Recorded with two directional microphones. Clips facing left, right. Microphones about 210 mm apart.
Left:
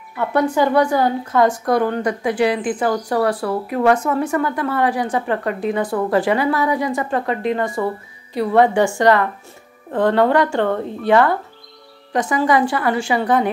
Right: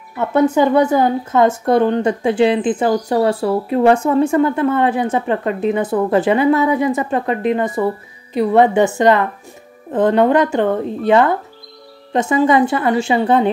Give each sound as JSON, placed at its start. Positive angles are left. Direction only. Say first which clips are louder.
{"t": 0.2, "sound": "speech", "louder": "right 4 dB", "side_deg": -20}